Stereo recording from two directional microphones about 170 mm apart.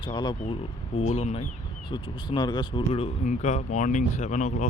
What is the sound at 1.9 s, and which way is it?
Speech, 25° left (ahead or behind).